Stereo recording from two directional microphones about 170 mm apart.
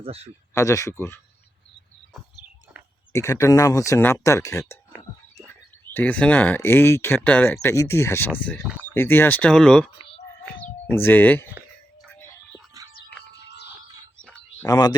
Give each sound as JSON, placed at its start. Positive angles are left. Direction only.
{"t": 0.0, "sound": "speech", "side_deg": -35}
{"t": 0.5, "sound": "speech", "side_deg": 20}
{"t": 2.8, "sound": "a sound", "side_deg": -5}
{"t": 3.1, "sound": "speech", "side_deg": 15}
{"t": 5.8, "sound": "speech", "side_deg": 10}
{"t": 12.7, "sound": "whispering", "side_deg": -20}
{"t": 13.4, "sound": "music", "side_deg": 80}
{"t": 14.2, "sound": "a sound", "side_deg": 5}
{"t": 14.7, "sound": "speech", "side_deg": 25}